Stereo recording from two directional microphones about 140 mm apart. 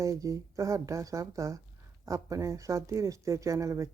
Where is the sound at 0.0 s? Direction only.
25° right (ahead or behind).